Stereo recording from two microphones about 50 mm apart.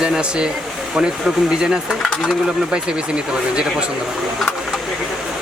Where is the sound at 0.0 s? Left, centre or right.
Centre.